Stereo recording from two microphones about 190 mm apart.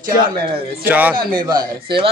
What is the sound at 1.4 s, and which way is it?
Speech, 25° right (ahead or behind).